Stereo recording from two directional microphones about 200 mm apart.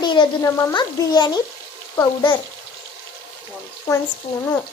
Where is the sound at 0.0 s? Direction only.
20° left (ahead or behind).